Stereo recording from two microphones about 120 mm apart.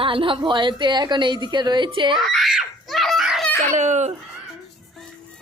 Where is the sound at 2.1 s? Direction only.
Centre (ahead or behind).